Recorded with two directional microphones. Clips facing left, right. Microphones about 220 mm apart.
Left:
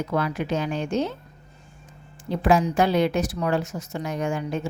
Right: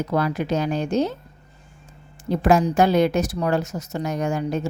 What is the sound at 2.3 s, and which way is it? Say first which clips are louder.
A woman's voice: right 2 dB; 45° right (ahead or behind).